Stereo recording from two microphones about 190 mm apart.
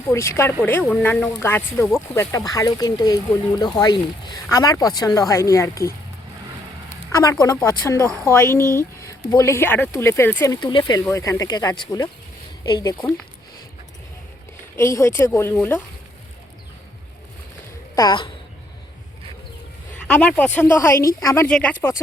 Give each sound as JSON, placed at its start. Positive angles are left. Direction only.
{"t": 0.1, "sound": "speech", "side_deg": 15}
{"t": 7.1, "sound": "speech", "side_deg": 20}
{"t": 14.8, "sound": "speech", "side_deg": 15}
{"t": 17.9, "sound": "a woman's voice", "side_deg": 20}
{"t": 19.9, "sound": "speech", "side_deg": 5}